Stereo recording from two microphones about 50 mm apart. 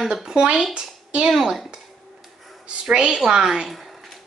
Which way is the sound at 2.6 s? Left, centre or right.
Right.